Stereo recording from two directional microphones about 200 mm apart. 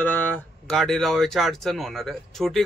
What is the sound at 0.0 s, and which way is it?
Speech, 10° left (ahead or behind).